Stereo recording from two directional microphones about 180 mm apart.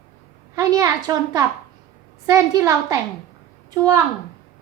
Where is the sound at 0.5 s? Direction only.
20° right (ahead or behind).